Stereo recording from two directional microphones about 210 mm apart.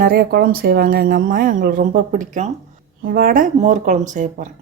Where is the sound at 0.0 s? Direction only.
45° right (ahead or behind).